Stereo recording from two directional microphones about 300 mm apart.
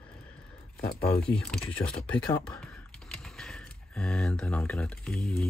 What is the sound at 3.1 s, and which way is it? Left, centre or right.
Speech, centre.